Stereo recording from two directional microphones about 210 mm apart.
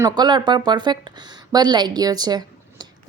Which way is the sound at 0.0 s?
20° right (ahead or behind).